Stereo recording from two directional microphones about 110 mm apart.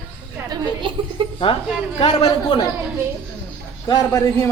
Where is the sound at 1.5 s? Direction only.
55° left (ahead or behind).